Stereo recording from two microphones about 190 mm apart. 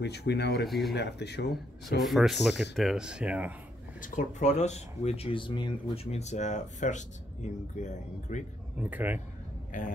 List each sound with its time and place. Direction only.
0.0 s speech: 60° left (ahead or behind)
0.7 s speech: centre (ahead or behind)
0.9 s speech: 65° left (ahead or behind)
2.0 s speech: centre (ahead or behind)
4.0 s speech: 45° left (ahead or behind); by 6.1 s 25° left (ahead or behind)
6.1 s speech: 35° left (ahead or behind)
8.7 s speech: 10° right (ahead or behind)
9.7 s speech: 45° left (ahead or behind)